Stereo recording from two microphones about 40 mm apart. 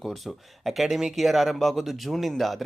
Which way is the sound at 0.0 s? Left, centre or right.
Centre.